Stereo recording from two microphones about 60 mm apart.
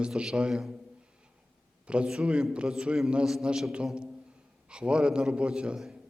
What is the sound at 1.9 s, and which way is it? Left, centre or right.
A man's voice, centre.